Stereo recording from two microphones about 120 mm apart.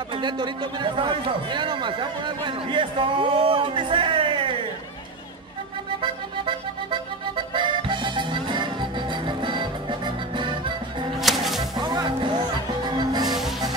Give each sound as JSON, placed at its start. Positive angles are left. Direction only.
{"t": 0.1, "sound": "speech", "side_deg": -40}
{"t": 5.9, "sound": "music", "side_deg": -45}
{"t": 11.1, "sound": "music", "side_deg": 0}
{"t": 11.7, "sound": "music", "side_deg": -35}
{"t": 13.3, "sound": "music", "side_deg": 0}